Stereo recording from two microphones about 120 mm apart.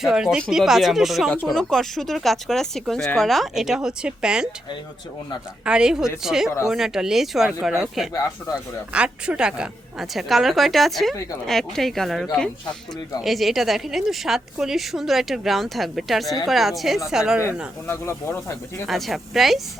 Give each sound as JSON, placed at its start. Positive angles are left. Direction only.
{"t": 0.0, "sound": "a woman's voice", "side_deg": -5}
{"t": 5.6, "sound": "a woman's voice", "side_deg": -5}
{"t": 17.8, "sound": "speech", "side_deg": 20}
{"t": 18.9, "sound": "a woman's voice", "side_deg": 0}